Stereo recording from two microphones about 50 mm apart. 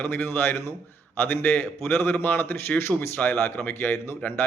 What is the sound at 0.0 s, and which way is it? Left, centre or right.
A man's voice, left.